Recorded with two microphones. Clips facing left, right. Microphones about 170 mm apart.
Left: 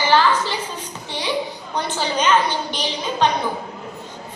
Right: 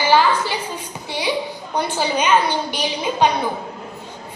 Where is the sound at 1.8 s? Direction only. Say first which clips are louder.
Right 2 dB; 10° right (ahead or behind).